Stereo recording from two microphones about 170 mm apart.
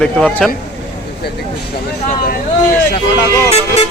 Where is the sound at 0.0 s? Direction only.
5° left (ahead or behind).